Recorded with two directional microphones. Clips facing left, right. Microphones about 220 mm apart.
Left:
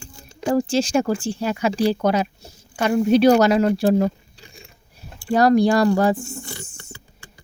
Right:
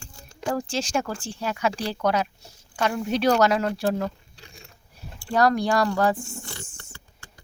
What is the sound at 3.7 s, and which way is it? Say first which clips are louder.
Speech: left 7 dB; 30° left (ahead or behind).